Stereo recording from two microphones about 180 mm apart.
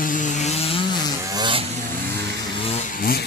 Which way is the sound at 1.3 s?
25° right (ahead or behind).